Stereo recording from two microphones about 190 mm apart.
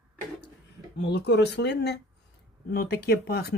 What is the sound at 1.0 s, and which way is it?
Speech, 60° left (ahead or behind).